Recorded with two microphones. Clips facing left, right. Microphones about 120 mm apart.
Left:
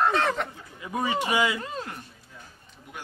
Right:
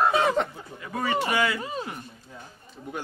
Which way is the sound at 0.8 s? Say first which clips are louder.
Even; 15° left (ahead or behind).